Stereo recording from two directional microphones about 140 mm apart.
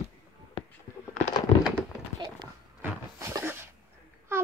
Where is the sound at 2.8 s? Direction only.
20° right (ahead or behind).